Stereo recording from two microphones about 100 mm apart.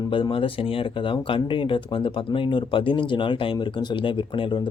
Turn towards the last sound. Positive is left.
turn(degrees=55)  # may be behind; listen again after turning